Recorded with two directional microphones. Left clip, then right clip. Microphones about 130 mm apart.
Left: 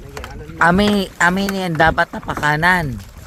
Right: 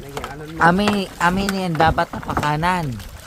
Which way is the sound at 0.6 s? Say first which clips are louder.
Left 2 dB; 85° left.